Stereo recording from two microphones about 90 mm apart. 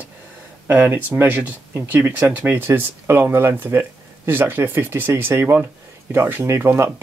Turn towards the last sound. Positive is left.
turn(degrees=-30)  # may be behind; listen again after turning